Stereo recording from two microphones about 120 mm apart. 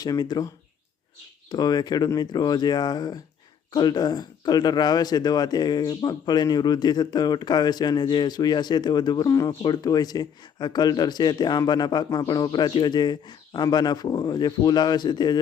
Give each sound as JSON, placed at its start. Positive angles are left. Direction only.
{"t": 0.0, "sound": "speech", "side_deg": 35}